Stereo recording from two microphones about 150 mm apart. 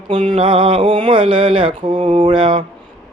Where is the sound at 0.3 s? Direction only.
40° right (ahead or behind).